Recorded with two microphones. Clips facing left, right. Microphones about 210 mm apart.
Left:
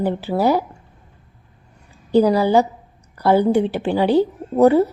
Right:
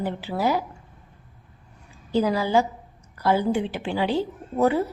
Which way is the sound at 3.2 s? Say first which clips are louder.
Left 7 dB; 55° left (ahead or behind).